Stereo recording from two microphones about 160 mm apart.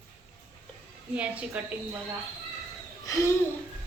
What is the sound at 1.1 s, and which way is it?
Speech, 10° right (ahead or behind).